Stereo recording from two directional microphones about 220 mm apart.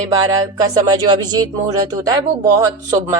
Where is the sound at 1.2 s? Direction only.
20° right (ahead or behind).